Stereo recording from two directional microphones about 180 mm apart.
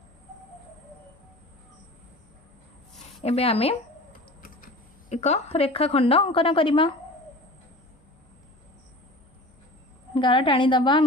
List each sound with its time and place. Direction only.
3.2 s speech: 35° left (ahead or behind)
4.4 s speech: 50° left (ahead or behind); by 6.9 s 30° left (ahead or behind)
10.2 s a woman's voice: 25° left (ahead or behind)